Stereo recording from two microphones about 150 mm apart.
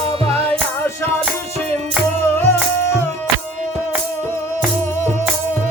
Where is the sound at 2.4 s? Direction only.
15° left (ahead or behind).